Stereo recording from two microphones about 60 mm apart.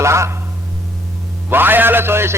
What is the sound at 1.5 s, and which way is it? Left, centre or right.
Speech, right.